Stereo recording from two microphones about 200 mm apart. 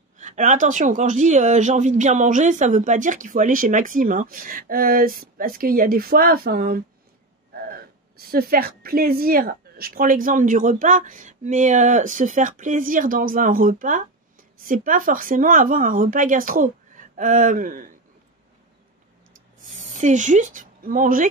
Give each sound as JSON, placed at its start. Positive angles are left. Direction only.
{"t": 0.2, "sound": "speech", "side_deg": -40}
{"t": 8.2, "sound": "a woman's voice", "side_deg": -50}
{"t": 19.9, "sound": "a woman's voice", "side_deg": -40}